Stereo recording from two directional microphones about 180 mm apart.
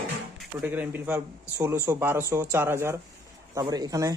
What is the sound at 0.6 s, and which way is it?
Speech, 10° right (ahead or behind).